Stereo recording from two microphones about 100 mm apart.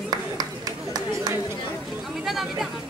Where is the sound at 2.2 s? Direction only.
Centre (ahead or behind).